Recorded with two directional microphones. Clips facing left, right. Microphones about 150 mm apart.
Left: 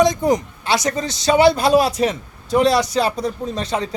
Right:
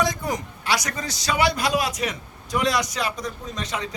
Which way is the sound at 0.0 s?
20° left (ahead or behind).